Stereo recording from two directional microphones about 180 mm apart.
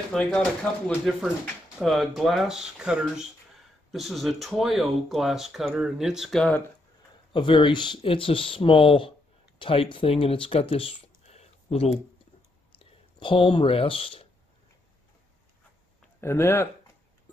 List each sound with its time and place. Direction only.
0.1 s speech: 5° left (ahead or behind)
7.3 s speech: 25° left (ahead or behind)
16.2 s speech: 15° left (ahead or behind)